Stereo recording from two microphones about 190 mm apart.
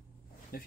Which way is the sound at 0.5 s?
50° left (ahead or behind).